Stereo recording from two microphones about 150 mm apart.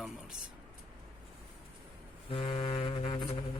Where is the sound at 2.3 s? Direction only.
35° left (ahead or behind).